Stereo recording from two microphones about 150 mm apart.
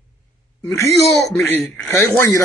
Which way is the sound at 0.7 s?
20° left (ahead or behind).